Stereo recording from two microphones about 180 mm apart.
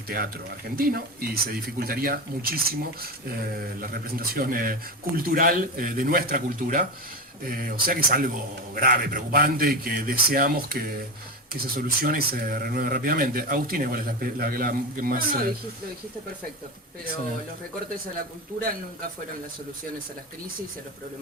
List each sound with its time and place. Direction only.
0.1 s a man's voice: 55° right (ahead or behind)
3.8 s a man's voice: 55° right (ahead or behind)